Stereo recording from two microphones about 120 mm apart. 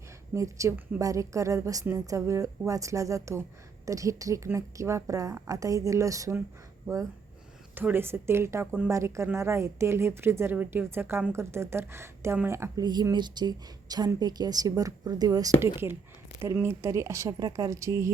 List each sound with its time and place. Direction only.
0.3 s speech: 25° right (ahead or behind)
7.8 s speech: 15° right (ahead or behind)
12.8 s speech: 35° right (ahead or behind)
16.6 s speech: 20° right (ahead or behind)